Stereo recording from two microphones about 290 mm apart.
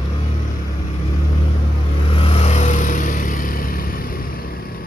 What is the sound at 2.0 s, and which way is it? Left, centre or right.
Vehicle, centre.